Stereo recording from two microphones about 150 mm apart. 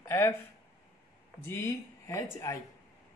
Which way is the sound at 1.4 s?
20° left (ahead or behind).